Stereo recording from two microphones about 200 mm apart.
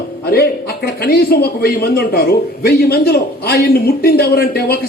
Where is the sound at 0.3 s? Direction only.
50° left (ahead or behind).